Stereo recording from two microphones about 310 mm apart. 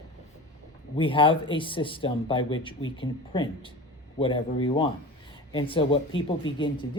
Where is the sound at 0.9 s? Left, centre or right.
Centre.